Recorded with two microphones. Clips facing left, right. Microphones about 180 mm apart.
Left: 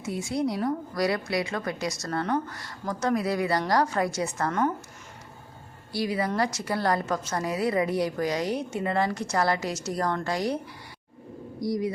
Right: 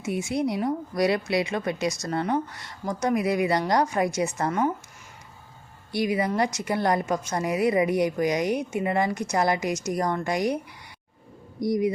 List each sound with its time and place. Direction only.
0.0 s a woman's voice: 20° right (ahead or behind)
5.9 s a woman's voice: 20° right (ahead or behind)
11.6 s a woman's voice: 20° right (ahead or behind)